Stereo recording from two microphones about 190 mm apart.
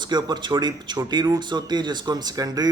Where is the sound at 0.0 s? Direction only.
25° right (ahead or behind).